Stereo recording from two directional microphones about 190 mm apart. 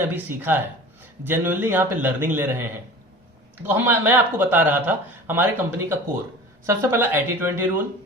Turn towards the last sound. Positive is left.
turn(degrees=-10)  # may be behind; listen again after turning